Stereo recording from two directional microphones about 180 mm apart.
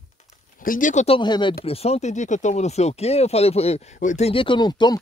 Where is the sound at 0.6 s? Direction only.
50° left (ahead or behind).